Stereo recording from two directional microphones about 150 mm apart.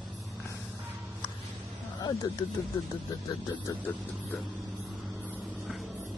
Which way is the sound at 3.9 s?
10° left (ahead or behind).